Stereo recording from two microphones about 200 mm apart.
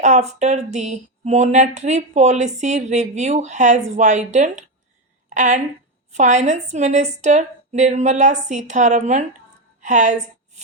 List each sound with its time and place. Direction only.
0.0 s a woman's voice: 35° right (ahead or behind)